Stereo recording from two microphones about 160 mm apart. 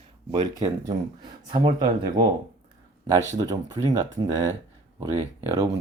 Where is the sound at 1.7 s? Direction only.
50° right (ahead or behind).